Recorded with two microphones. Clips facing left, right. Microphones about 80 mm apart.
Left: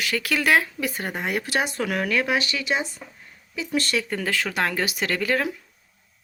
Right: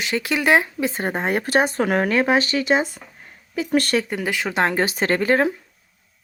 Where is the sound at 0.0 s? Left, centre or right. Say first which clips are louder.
Right 3 dB; right.